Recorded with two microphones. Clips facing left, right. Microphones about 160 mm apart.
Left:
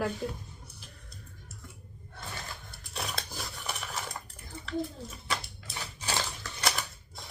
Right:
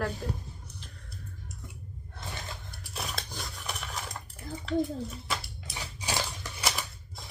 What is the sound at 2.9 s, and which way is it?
Cutlery, centre (ahead or behind).